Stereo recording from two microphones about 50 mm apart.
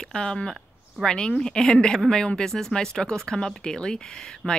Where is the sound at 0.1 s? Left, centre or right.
Centre.